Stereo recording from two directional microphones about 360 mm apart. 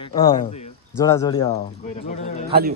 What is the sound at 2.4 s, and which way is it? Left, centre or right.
Speech, right.